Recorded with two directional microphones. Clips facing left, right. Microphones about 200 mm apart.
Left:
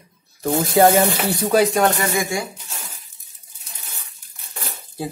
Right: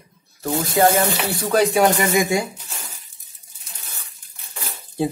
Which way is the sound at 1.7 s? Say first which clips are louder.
Right 2 dB; 15° right (ahead or behind).